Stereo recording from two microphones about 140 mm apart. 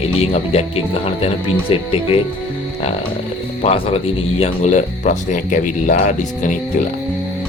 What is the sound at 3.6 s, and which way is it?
Speech, 50° left (ahead or behind).